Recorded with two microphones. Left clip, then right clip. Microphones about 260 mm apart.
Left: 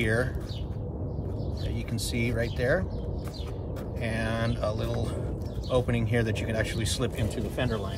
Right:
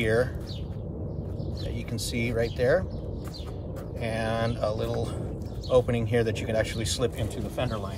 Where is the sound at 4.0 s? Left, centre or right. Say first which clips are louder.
Right 3 dB; centre.